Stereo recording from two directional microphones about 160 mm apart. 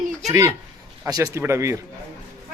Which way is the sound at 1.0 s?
20° right (ahead or behind).